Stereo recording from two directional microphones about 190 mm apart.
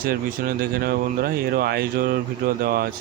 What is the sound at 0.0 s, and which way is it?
Speech, 50° right (ahead or behind).